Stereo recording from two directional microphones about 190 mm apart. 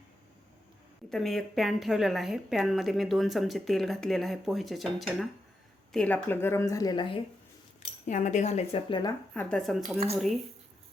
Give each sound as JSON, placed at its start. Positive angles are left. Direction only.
{"t": 1.1, "sound": "a woman's voice", "side_deg": 0}
{"t": 8.0, "sound": "speech", "side_deg": 40}
{"t": 9.3, "sound": "a woman's voice", "side_deg": 5}